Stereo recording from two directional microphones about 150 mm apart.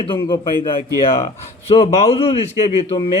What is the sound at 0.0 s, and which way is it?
Speech, 35° left (ahead or behind).